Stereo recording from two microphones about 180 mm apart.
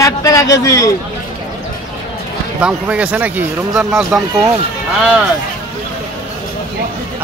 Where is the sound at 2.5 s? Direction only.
5° right (ahead or behind).